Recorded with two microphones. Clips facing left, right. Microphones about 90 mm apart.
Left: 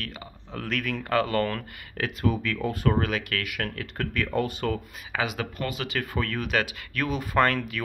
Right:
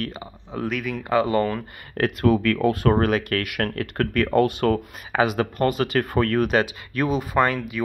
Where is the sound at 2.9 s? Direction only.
45° right (ahead or behind).